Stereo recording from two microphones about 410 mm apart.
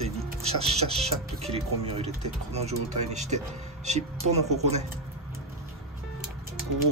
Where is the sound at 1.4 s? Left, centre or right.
Centre.